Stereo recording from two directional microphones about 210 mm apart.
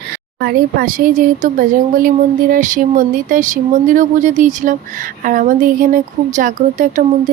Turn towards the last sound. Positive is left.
turn(degrees=-35)  # may be behind; listen again after turning